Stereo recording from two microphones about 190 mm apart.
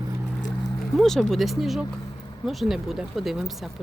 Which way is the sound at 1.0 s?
Centre (ahead or behind).